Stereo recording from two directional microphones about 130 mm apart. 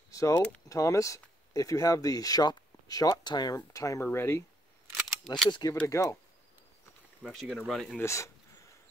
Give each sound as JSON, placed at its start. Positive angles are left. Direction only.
{"t": 0.1, "sound": "a sound", "side_deg": 25}
{"t": 0.7, "sound": "speech", "side_deg": 25}
{"t": 4.9, "sound": "a sound", "side_deg": 0}
{"t": 5.5, "sound": "speech", "side_deg": 30}
{"t": 7.2, "sound": "speech", "side_deg": 0}
{"t": 8.0, "sound": "speech", "side_deg": 20}